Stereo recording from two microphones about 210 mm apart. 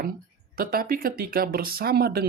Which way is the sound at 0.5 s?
45° right (ahead or behind).